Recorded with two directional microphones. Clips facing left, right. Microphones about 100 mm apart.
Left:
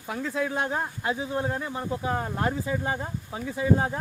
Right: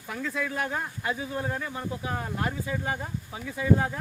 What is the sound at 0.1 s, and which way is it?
Speech, 30° left (ahead or behind).